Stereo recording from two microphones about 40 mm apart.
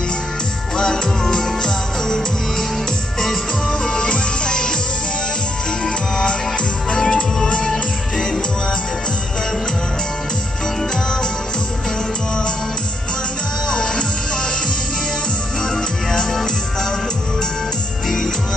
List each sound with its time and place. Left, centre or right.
0.7 s music: centre
3.8 s music: centre
6.9 s music: centre
13.7 s music: centre
15.7 s music: centre
18.0 s music: centre